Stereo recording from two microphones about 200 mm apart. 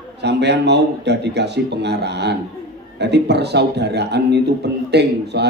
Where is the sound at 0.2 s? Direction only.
55° right (ahead or behind).